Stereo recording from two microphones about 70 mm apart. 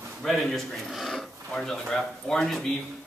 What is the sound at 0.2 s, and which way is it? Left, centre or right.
Speech, centre.